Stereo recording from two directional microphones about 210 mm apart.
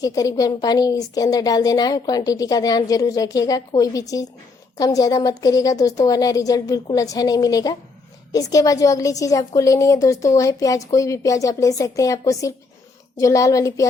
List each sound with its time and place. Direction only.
0.0 s a woman's voice: 15° left (ahead or behind)